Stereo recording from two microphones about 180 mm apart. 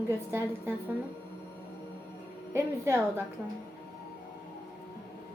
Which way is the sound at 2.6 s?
15° right (ahead or behind).